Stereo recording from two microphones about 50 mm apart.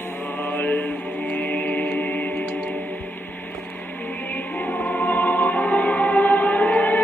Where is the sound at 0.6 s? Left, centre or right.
Left.